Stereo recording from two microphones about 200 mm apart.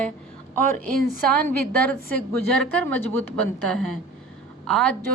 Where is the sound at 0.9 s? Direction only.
5° left (ahead or behind).